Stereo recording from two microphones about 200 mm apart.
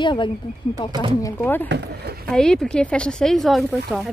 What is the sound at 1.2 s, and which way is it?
A woman's voice, 10° left (ahead or behind).